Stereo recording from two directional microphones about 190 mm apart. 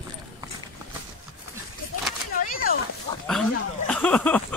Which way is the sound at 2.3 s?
50° left (ahead or behind).